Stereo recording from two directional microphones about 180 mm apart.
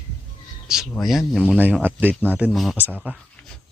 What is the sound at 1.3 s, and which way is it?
A man's voice, 5° right (ahead or behind).